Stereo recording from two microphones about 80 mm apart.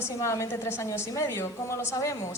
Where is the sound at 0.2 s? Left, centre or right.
Left.